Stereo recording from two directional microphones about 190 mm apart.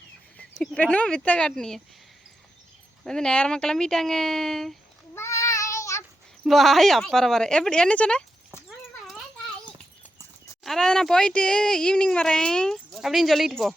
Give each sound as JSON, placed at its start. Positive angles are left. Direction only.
{"t": 0.3, "sound": "speech", "side_deg": 5}
{"t": 3.0, "sound": "speech", "side_deg": 5}
{"t": 5.1, "sound": "child singing", "side_deg": 15}
{"t": 6.4, "sound": "speech", "side_deg": 0}
{"t": 10.6, "sound": "speech", "side_deg": 0}